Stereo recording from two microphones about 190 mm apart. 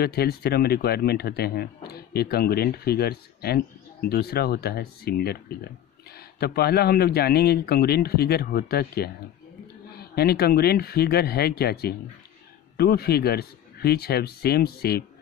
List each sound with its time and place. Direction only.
0.0 s speech: 55° left (ahead or behind)